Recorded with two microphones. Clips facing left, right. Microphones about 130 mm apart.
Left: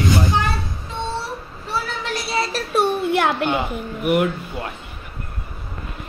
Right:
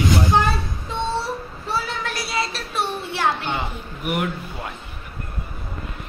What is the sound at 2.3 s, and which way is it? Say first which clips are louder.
A child's voice: left 6 dB; 45° left (ahead or behind).